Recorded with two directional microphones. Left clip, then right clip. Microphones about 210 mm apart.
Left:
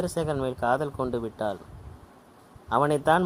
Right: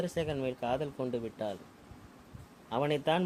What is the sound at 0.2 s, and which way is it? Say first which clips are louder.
Speech: left 7 dB; 35° left (ahead or behind).